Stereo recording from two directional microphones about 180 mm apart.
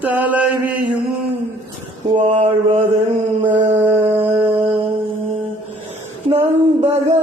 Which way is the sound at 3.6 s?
10° right (ahead or behind).